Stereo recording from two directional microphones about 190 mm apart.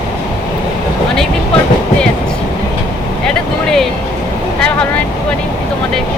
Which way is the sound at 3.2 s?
5° left (ahead or behind).